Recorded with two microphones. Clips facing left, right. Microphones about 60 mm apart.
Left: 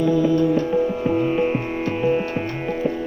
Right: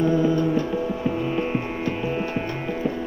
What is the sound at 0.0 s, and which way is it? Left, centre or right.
Music, right.